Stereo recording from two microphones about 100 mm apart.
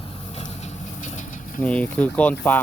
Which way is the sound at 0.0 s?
60° left (ahead or behind).